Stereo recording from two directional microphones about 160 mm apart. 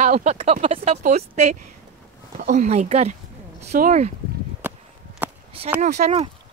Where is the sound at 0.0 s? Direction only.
50° right (ahead or behind).